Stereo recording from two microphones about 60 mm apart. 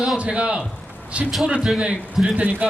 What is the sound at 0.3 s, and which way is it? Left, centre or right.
Speech, centre.